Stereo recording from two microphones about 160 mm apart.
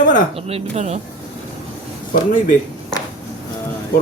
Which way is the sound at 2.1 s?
55° left (ahead or behind).